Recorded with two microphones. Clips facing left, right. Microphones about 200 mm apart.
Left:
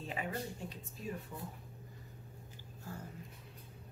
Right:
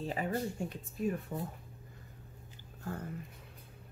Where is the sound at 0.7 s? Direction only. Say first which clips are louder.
Right 9 dB; 55° right (ahead or behind).